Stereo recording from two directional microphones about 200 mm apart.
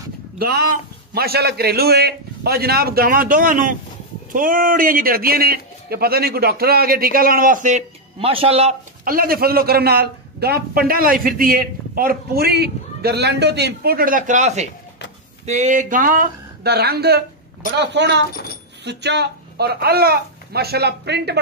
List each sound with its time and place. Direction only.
0.4 s a man's voice: 50° right (ahead or behind); by 8.7 s 30° right (ahead or behind)
9.0 s a man's voice: 45° right (ahead or behind)